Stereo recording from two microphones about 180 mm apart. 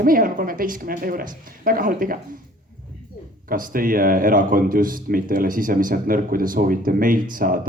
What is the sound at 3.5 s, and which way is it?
Speech, 50° right (ahead or behind).